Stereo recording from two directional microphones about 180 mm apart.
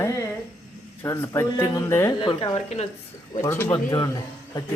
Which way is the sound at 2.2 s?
25° left (ahead or behind).